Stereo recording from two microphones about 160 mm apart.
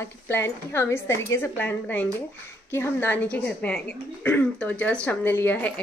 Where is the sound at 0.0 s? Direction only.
15° left (ahead or behind).